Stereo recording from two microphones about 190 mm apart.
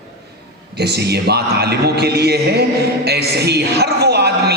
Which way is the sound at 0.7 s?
60° right (ahead or behind).